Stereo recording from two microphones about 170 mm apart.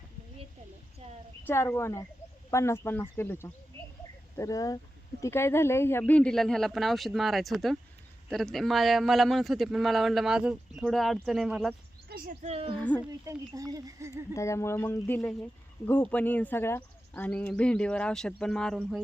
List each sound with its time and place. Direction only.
1.5 s a man's voice: 15° left (ahead or behind); by 11.7 s centre (ahead or behind)
12.0 s a sound: 60° right (ahead or behind)
12.4 s a woman's voice: 35° right (ahead or behind)
12.7 s speech: 10° left (ahead or behind)
13.2 s speech: 20° right (ahead or behind)
14.3 s speech: 15° left (ahead or behind); by 19.0 s centre (ahead or behind)